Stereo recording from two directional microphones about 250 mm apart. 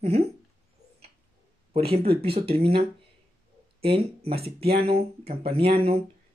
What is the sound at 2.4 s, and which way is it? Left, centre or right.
Speech, right.